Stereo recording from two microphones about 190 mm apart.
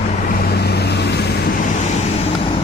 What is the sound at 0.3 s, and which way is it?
Vehicle, 55° left (ahead or behind).